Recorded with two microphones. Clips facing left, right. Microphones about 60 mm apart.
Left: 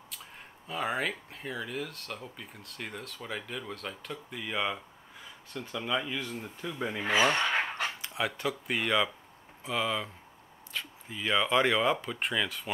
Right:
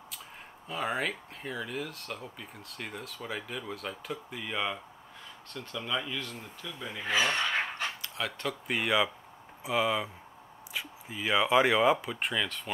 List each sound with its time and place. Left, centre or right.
0.7 s speech: centre
6.6 s speech: left
8.0 s dog: left
8.3 s speech: centre